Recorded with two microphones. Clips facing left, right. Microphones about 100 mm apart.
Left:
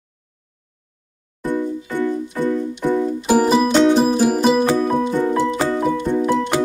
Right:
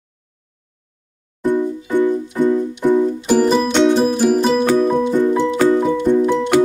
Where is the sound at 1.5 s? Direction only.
20° right (ahead or behind).